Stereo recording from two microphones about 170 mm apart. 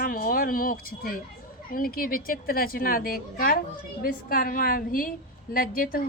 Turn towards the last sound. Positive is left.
turn(degrees=60)  # may be behind; listen again after turning